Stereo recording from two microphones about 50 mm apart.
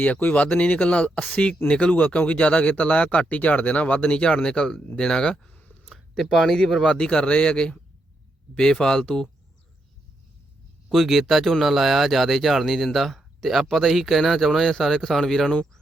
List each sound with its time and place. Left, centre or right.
0.0 s speech: left; by 5.5 s centre
5.8 s a sound: centre
6.3 s speech: centre
10.9 s speech: centre